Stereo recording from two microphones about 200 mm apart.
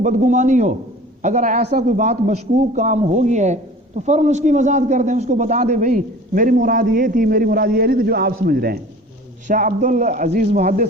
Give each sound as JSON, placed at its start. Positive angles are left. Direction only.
{"t": 0.0, "sound": "a man's voice", "side_deg": -40}
{"t": 9.5, "sound": "a man's voice", "side_deg": -40}